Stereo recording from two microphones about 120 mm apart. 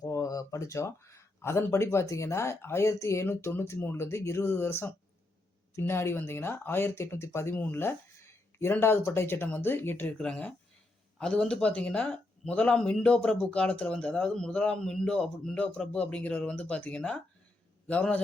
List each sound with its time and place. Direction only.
0.0 s speech: 25° left (ahead or behind); by 18.2 s 10° left (ahead or behind)